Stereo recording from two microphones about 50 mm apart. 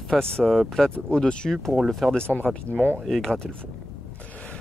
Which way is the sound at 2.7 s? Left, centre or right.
Left.